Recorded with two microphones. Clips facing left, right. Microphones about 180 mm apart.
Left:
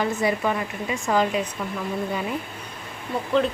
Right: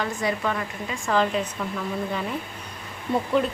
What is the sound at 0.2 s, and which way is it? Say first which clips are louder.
A woman's voice: left 3 dB; 20° left (ahead or behind).